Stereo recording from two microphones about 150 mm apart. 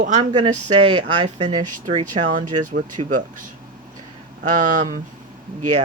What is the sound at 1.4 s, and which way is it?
Speech, 55° right (ahead or behind).